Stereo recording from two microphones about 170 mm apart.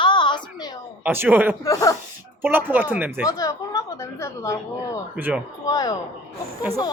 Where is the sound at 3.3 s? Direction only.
20° left (ahead or behind).